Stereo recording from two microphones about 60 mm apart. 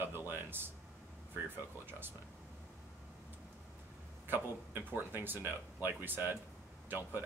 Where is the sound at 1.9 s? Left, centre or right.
Right.